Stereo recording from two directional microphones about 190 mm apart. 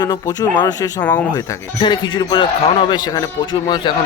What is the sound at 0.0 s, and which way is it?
A man's voice, 20° left (ahead or behind).